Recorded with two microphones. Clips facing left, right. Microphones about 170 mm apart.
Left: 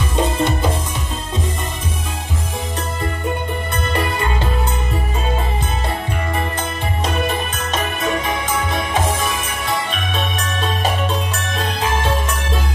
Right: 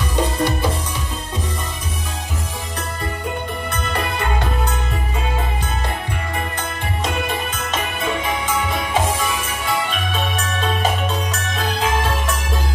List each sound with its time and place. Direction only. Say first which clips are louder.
0.1 s music: left 1 dB; 25° left (ahead or behind)